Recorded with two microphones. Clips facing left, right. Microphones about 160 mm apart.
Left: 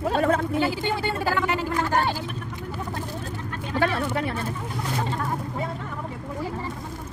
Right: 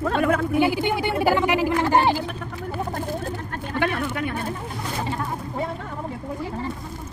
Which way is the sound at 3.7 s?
30° left (ahead or behind).